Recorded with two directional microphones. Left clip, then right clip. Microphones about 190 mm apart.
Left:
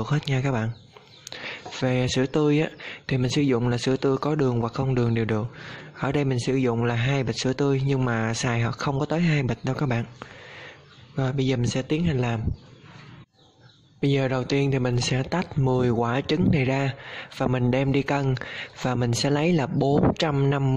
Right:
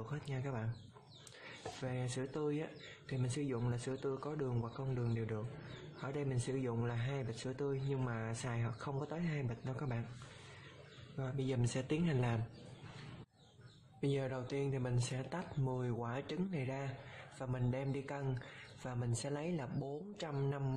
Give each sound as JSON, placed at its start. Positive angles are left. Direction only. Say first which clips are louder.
{"t": 0.0, "sound": "speech", "louder": "left 18 dB", "side_deg": 40}
{"t": 11.1, "sound": "a man's voice", "louder": "left 15 dB", "side_deg": 35}
{"t": 14.0, "sound": "speech", "louder": "left 15 dB", "side_deg": 35}